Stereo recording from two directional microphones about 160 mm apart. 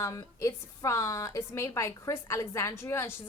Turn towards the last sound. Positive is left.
turn(degrees=15)  # may be behind; listen again after turning